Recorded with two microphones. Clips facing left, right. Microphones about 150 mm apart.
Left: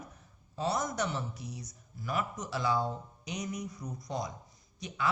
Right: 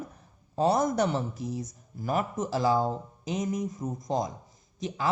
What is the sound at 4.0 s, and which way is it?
Speech, 90° right.